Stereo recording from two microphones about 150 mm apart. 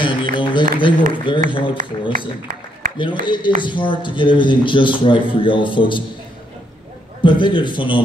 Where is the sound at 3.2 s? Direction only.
30° left (ahead or behind).